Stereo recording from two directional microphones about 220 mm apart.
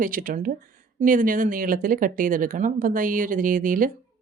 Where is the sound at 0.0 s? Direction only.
40° right (ahead or behind).